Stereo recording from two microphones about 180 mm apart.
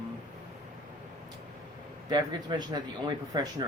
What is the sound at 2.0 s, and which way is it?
A man's voice, 25° right (ahead or behind).